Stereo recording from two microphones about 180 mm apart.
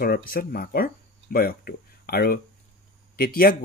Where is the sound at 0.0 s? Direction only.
55° left (ahead or behind).